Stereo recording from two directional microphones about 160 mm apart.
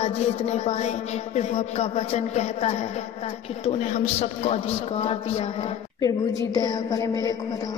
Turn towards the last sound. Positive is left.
turn(degrees=20)  # may be behind; listen again after turning